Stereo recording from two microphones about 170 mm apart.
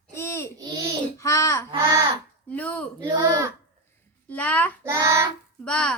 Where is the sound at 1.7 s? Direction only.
20° right (ahead or behind).